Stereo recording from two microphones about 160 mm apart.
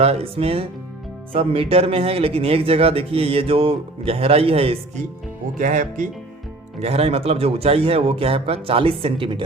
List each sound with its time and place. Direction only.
0.0 s speech: 40° right (ahead or behind)
5.5 s speech: 55° right (ahead or behind)
6.7 s speech: 40° right (ahead or behind)